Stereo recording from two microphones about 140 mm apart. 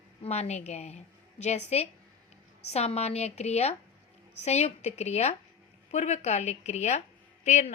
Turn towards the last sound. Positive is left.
turn(degrees=55)  # may be behind; listen again after turning